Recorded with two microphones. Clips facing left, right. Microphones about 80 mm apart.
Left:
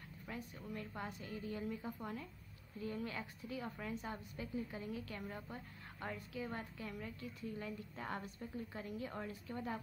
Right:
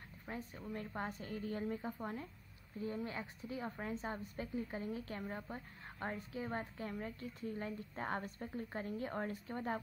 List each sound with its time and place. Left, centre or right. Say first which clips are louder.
0.3 s a woman's voice: right 2 dB; right
0.9 s a woman's voice: right 3 dB; right